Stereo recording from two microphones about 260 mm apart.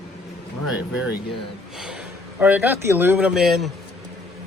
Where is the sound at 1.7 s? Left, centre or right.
Centre.